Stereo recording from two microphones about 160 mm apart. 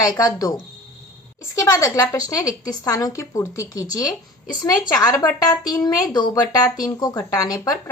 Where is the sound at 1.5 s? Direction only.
20° left (ahead or behind).